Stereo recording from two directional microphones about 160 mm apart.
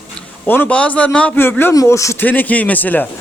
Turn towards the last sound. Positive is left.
turn(degrees=10)  # may be behind; listen again after turning